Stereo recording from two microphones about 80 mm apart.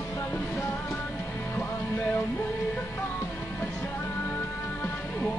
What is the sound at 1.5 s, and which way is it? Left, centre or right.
Music, centre.